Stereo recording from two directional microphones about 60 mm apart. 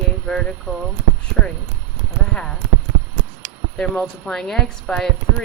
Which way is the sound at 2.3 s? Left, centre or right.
Centre.